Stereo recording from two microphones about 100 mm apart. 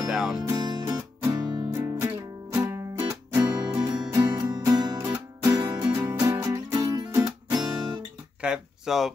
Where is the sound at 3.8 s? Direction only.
45° right (ahead or behind).